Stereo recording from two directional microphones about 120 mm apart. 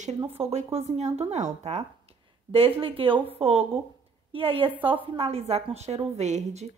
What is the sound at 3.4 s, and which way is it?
A woman's voice, 60° right (ahead or behind).